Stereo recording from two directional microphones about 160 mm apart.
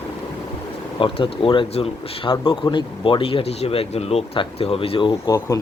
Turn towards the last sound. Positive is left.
turn(degrees=25)  # may be behind; listen again after turning